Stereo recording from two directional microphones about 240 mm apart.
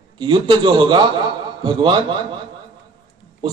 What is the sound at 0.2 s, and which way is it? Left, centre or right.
A man's voice, centre.